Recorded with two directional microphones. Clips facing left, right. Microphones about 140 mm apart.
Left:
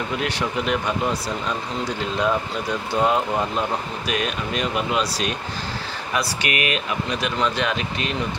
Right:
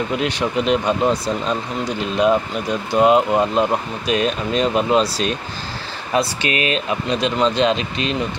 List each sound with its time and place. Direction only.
0.2 s speech: 20° right (ahead or behind)
4.1 s speech: 30° right (ahead or behind)